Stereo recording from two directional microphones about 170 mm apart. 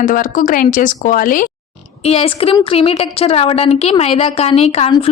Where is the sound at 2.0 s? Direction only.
35° left (ahead or behind).